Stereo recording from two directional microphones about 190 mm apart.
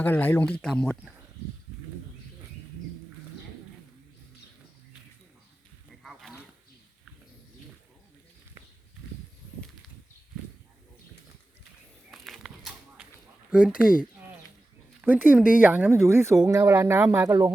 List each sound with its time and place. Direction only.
0.0 s speech: 10° left (ahead or behind)
6.0 s goose: centre (ahead or behind)
12.1 s a sound: centre (ahead or behind)
13.5 s speech: 5° right (ahead or behind)
15.0 s speech: 10° right (ahead or behind)